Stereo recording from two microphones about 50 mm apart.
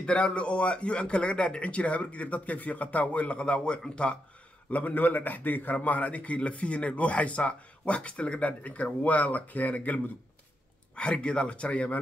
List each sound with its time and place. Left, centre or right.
0.0 s a man's voice: left
4.6 s a man's voice: left
11.0 s a man's voice: centre